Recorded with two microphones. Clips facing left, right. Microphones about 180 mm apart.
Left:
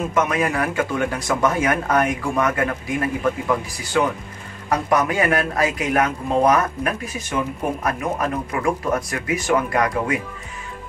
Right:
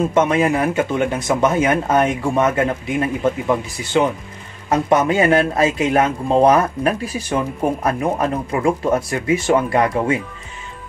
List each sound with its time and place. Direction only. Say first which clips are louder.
0.1 s a man's voice: right 5 dB; 30° right (ahead or behind)